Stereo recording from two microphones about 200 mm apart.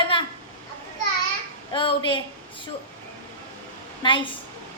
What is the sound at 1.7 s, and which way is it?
Speech, 25° left (ahead or behind).